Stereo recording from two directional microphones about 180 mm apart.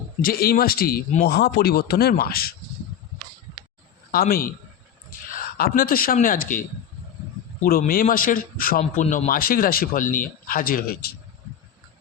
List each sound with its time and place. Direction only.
0.2 s speech: 55° left (ahead or behind)
4.1 s speech: 55° left (ahead or behind)